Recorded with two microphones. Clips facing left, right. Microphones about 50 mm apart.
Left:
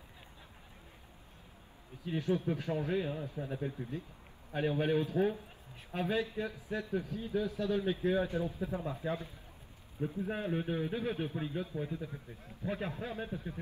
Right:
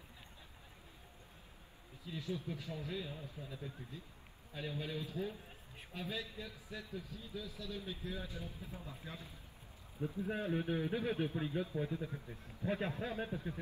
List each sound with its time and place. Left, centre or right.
2.0 s speech: left
9.9 s a man's voice: centre